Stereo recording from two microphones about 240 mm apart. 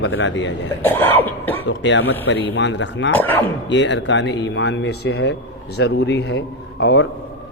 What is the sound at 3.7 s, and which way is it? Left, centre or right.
Speech, left.